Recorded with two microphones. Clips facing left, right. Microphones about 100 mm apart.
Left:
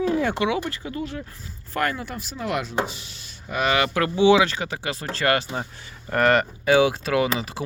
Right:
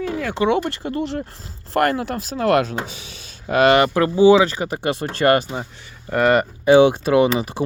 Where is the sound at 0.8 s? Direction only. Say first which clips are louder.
Right 6 dB; 55° right (ahead or behind); by 3.6 s 90° right.